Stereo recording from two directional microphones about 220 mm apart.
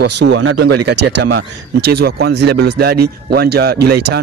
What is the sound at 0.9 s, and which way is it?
Speech, 90° right.